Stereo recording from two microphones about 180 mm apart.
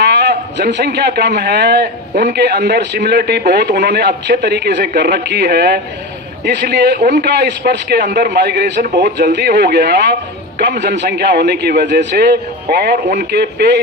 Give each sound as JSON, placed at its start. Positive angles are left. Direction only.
{"t": 0.0, "sound": "a man's voice", "side_deg": -70}
{"t": 2.1, "sound": "a man's voice", "side_deg": -55}